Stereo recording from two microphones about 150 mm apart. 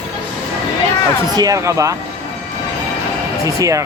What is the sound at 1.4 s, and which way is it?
Speech, 20° right (ahead or behind).